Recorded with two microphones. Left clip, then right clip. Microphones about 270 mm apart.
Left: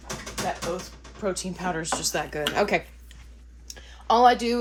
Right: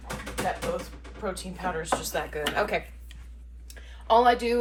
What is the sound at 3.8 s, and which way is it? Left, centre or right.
Speech, left.